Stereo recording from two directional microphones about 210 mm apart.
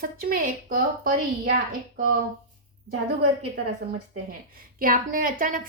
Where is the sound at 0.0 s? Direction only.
45° right (ahead or behind).